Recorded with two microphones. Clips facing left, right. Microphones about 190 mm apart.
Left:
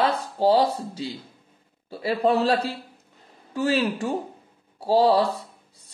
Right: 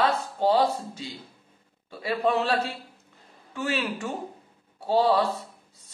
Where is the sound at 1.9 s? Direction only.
35° left (ahead or behind).